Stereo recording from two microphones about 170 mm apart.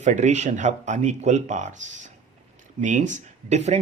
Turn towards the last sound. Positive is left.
turn(degrees=-40)  # may be behind; listen again after turning